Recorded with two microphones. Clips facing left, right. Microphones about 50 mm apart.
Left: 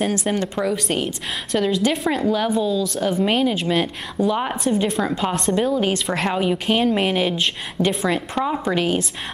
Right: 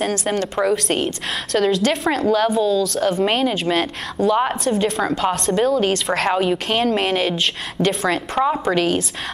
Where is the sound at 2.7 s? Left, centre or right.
Right.